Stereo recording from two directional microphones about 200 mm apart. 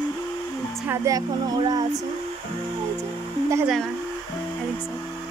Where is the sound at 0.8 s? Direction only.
15° right (ahead or behind).